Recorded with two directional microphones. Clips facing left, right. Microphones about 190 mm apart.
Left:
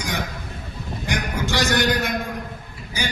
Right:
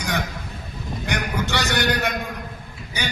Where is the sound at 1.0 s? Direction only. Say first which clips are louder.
Even; 65° right (ahead or behind).